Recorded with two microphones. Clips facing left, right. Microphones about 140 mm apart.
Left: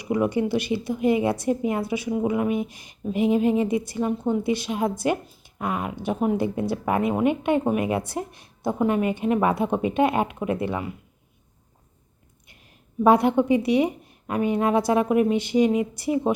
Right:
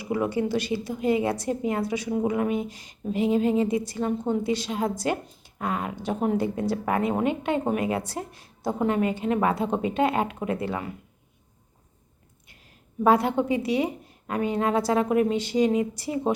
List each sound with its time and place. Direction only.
0.0 s a woman's voice: 15° left (ahead or behind)
13.1 s a woman's voice: 15° left (ahead or behind)